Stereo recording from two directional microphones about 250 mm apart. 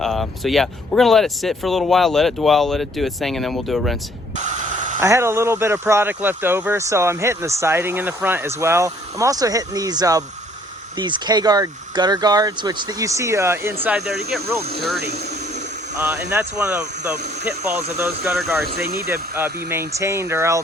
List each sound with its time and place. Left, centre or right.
0.0 s speech: centre
4.4 s spray: right
4.9 s speech: centre
16.3 s speech: centre
17.9 s speech: centre
18.8 s speech: right
19.3 s speech: centre